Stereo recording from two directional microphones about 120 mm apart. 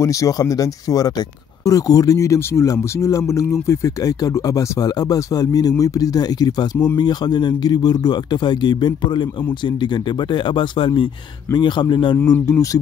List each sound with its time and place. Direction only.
0.0 s speech: 25° left (ahead or behind)
12.2 s speech: 20° left (ahead or behind)